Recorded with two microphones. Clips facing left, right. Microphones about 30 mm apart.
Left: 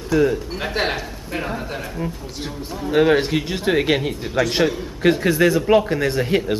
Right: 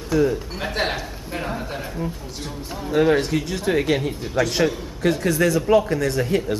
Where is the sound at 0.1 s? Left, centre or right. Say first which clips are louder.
Left 2 dB; centre.